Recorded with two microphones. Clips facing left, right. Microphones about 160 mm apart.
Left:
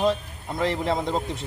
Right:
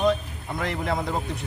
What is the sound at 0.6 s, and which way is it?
Speech, 25° left (ahead or behind).